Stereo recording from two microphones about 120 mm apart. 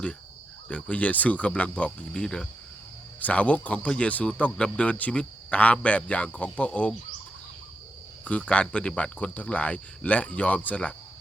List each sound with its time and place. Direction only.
0.7 s speech: 10° left (ahead or behind)
8.2 s speech: 10° left (ahead or behind)